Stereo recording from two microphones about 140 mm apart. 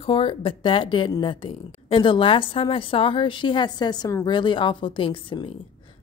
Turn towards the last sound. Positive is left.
turn(degrees=35)  # may be behind; listen again after turning